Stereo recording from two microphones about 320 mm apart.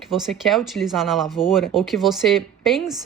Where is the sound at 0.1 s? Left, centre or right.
Centre.